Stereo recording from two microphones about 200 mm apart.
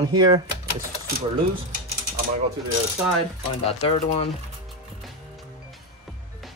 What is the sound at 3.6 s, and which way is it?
Speech, 30° left (ahead or behind).